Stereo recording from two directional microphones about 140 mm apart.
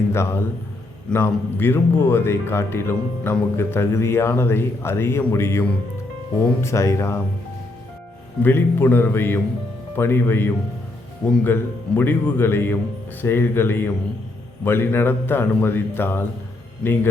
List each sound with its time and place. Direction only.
0.1 s speech: 20° left (ahead or behind)
8.4 s speech: 15° left (ahead or behind)